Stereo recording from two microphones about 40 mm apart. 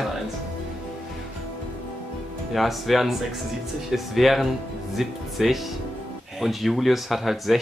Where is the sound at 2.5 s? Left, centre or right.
Centre.